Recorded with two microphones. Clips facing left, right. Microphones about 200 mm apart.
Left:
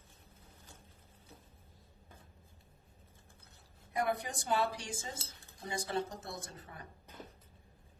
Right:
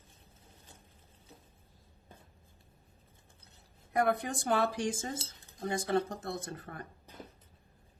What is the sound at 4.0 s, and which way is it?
Speech, 55° right (ahead or behind).